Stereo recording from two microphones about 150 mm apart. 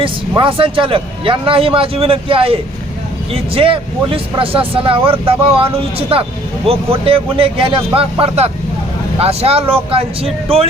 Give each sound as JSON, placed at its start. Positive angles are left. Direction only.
{"t": 0.0, "sound": "speech", "side_deg": -35}